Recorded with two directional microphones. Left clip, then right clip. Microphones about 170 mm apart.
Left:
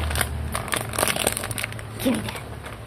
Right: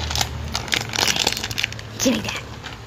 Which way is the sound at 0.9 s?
20° left (ahead or behind).